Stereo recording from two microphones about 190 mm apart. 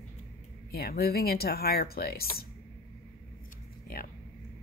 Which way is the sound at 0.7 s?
55° left (ahead or behind).